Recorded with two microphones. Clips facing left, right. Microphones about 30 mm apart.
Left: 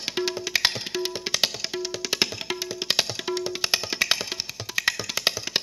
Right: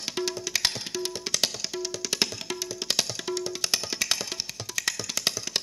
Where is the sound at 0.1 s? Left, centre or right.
Left.